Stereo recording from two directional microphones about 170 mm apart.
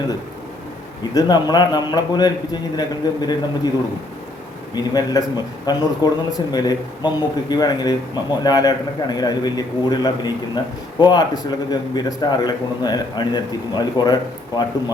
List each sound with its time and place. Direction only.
1.1 s a man's voice: 25° left (ahead or behind)
4.7 s a man's voice: 25° left (ahead or behind)